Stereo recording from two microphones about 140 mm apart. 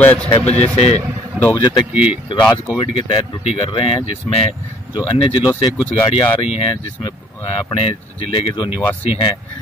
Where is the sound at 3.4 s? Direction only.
50° left (ahead or behind).